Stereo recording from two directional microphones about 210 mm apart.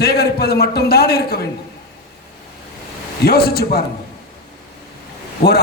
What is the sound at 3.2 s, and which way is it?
Speech, 50° left (ahead or behind).